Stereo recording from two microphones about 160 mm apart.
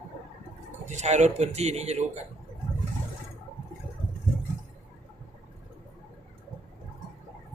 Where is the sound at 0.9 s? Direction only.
45° right (ahead or behind).